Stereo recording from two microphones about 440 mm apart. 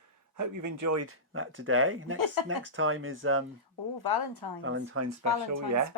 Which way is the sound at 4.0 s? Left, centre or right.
Left.